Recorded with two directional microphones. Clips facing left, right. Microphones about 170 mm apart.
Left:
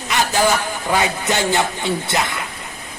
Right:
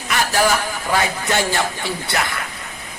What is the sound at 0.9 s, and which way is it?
Speech, 20° left (ahead or behind).